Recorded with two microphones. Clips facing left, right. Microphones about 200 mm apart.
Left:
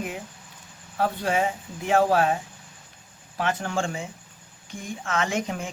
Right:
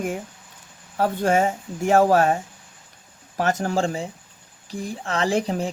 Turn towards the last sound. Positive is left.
turn(degrees=-35)  # may be behind; listen again after turning